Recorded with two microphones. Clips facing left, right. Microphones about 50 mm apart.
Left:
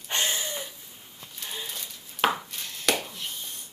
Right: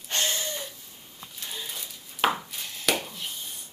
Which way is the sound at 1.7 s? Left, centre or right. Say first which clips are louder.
Even; centre.